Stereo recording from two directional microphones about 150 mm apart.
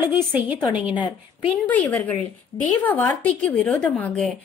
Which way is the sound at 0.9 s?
30° left (ahead or behind).